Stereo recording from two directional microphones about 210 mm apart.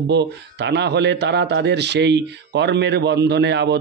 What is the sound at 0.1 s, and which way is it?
A man's voice, 55° right (ahead or behind).